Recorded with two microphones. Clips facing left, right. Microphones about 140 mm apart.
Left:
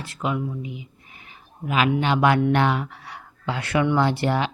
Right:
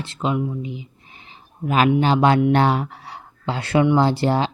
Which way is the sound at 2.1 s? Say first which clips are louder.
Right 3 dB; 30° right (ahead or behind).